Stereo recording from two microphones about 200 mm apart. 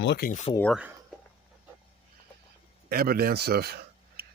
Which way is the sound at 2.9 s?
50° right (ahead or behind).